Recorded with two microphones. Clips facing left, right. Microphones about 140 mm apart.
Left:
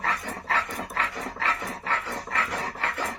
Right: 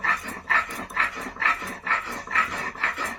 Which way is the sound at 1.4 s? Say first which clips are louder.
Even; 25° left (ahead or behind).